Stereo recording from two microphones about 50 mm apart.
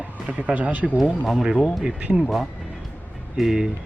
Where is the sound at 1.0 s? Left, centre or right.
Centre.